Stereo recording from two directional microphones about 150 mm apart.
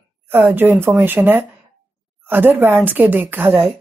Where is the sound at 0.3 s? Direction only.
10° right (ahead or behind).